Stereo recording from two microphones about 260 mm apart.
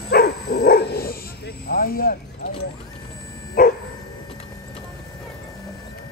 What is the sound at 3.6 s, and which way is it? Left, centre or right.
Dog, left.